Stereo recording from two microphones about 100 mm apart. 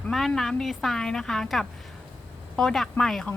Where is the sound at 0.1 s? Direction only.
5° left (ahead or behind).